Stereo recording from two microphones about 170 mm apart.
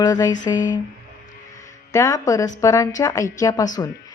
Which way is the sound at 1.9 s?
20° left (ahead or behind).